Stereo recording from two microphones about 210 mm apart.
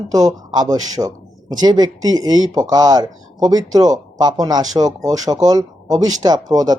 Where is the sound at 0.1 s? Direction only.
15° right (ahead or behind).